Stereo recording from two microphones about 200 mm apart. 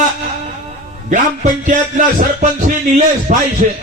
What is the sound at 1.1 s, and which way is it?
Speech, 40° right (ahead or behind).